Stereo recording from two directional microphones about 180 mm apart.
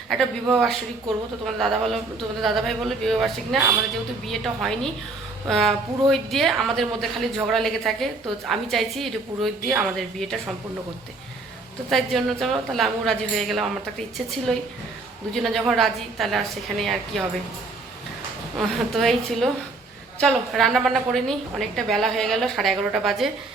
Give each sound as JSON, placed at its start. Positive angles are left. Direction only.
{"t": 0.4, "sound": "a woman's voice", "side_deg": 0}
{"t": 11.9, "sound": "a woman's voice", "side_deg": 0}
{"t": 18.7, "sound": "a woman's voice", "side_deg": 0}